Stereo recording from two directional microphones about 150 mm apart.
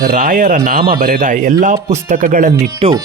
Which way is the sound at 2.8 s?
40° right (ahead or behind).